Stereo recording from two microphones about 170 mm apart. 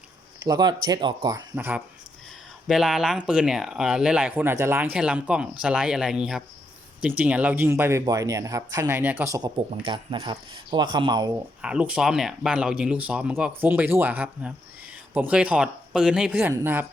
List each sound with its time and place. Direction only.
0.4 s speech: 25° right (ahead or behind)
1.5 s speech: 10° right (ahead or behind)
9.8 s speech: 30° right (ahead or behind)
11.6 s speech: 5° right (ahead or behind)